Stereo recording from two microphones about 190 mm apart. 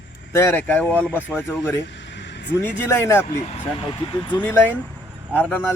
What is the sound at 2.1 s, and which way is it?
Vehicle, 65° left (ahead or behind).